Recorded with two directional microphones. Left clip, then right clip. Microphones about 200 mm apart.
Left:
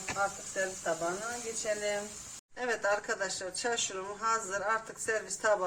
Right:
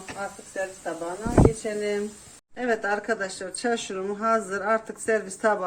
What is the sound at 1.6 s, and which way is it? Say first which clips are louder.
Speech: right 5 dB; 35° right (ahead or behind).